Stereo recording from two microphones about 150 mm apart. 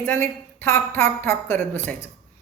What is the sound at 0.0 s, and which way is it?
A woman's voice, 15° left (ahead or behind).